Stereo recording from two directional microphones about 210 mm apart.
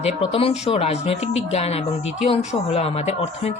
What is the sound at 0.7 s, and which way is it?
Speech, 30° left (ahead or behind).